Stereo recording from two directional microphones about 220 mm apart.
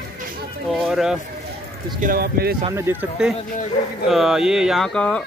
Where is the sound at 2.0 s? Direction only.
45° right (ahead or behind).